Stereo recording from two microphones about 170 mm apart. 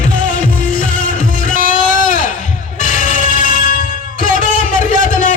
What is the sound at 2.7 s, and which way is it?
Music, 50° left (ahead or behind).